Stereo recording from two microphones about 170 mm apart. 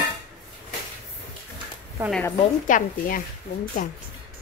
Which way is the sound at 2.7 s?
50° left (ahead or behind).